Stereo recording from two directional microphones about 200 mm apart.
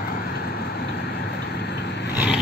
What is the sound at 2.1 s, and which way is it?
Vehicle, 5° right (ahead or behind).